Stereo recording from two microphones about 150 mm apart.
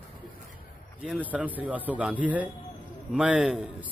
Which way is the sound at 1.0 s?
10° right (ahead or behind).